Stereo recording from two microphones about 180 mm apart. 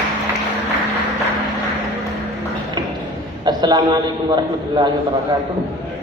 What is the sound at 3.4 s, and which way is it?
Speech, 25° right (ahead or behind).